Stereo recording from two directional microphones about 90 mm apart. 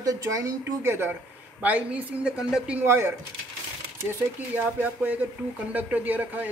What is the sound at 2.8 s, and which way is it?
Speech, 25° right (ahead or behind).